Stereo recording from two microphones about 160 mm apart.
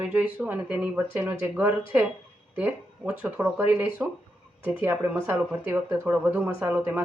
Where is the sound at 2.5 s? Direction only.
10° right (ahead or behind).